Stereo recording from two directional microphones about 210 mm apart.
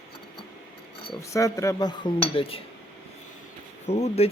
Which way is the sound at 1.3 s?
15° left (ahead or behind).